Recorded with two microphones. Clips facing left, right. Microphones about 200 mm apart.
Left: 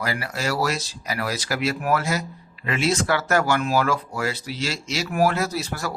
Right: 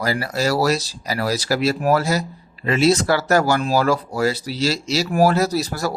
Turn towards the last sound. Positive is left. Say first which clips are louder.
# right 6 dB
turn(degrees=-35)  # may be behind; listen again after turning